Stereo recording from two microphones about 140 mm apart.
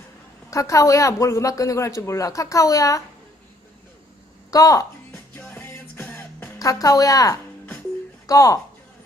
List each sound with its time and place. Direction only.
0.5 s a woman's voice: 25° left (ahead or behind)
4.5 s music: 25° left (ahead or behind)
6.6 s a woman's voice: 25° left (ahead or behind)